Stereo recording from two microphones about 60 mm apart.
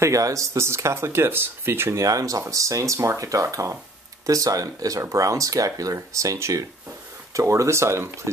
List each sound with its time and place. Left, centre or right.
0.0 s speech: right
2.0 s speech: right
5.9 s speech: right